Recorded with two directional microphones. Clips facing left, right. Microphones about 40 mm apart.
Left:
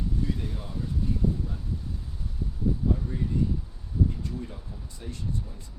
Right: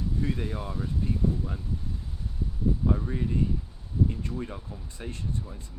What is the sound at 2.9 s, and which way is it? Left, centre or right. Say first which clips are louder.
Speech: right 1 dB; right.